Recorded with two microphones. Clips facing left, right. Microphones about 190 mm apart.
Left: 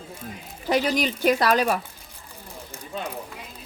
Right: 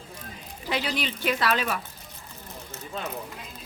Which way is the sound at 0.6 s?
45° left (ahead or behind).